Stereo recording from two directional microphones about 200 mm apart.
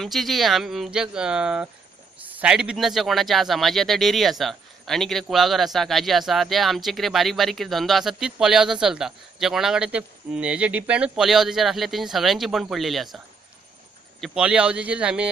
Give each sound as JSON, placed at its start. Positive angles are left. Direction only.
{"t": 0.0, "sound": "speech", "side_deg": 0}
{"t": 14.2, "sound": "speech", "side_deg": -5}